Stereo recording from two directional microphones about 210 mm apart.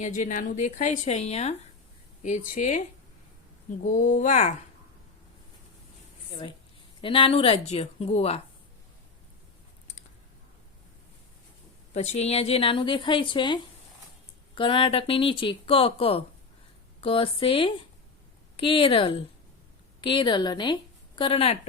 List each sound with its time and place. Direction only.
0.0 s a woman's voice: 35° left (ahead or behind)
3.8 s a woman's voice: 35° left (ahead or behind)
7.0 s speech: 25° left (ahead or behind)
11.9 s speech: 30° left (ahead or behind)